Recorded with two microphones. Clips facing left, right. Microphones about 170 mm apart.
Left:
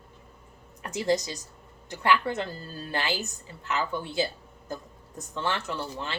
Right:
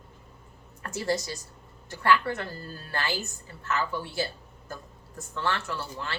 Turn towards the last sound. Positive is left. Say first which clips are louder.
# left 1 dB
turn(degrees=20)  # may be behind; listen again after turning